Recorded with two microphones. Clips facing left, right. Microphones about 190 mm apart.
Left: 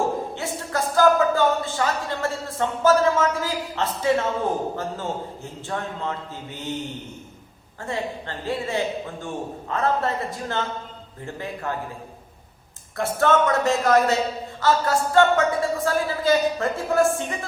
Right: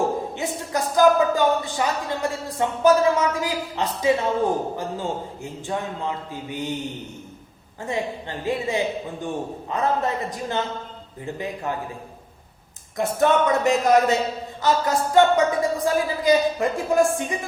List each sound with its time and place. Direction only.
0.3 s a woman's voice: 15° right (ahead or behind)
7.8 s a man's voice: 15° right (ahead or behind)
13.0 s a man's voice: 15° right (ahead or behind)